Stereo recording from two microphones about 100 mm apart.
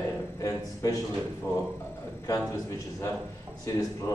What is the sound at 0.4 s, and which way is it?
Speech, 35° left (ahead or behind).